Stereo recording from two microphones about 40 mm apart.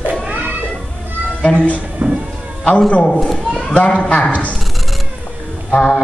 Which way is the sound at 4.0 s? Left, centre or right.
Left.